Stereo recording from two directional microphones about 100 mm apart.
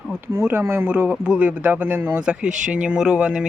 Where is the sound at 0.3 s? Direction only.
25° right (ahead or behind).